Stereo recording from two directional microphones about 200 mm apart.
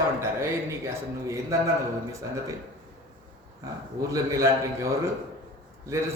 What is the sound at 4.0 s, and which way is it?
Speech, 15° right (ahead or behind).